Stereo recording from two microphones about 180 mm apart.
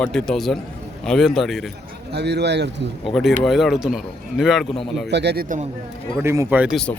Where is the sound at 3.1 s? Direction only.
Centre (ahead or behind).